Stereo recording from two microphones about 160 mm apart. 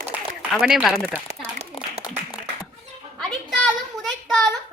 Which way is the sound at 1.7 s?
35° left (ahead or behind).